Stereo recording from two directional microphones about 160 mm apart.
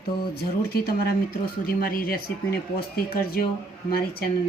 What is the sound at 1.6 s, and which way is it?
Speech, 65° left (ahead or behind).